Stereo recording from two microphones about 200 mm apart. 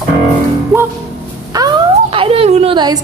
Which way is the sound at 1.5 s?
20° right (ahead or behind).